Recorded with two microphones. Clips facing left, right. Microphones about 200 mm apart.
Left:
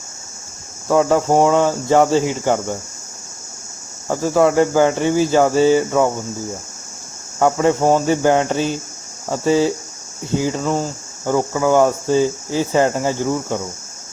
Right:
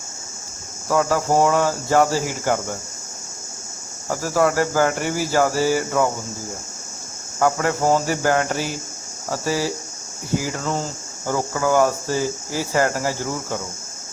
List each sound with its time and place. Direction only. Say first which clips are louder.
0.9 s speech: left 5 dB; 25° left (ahead or behind)
4.1 s speech: left 5 dB; 20° left (ahead or behind)
7.3 s speech: left 5 dB; 20° left (ahead or behind)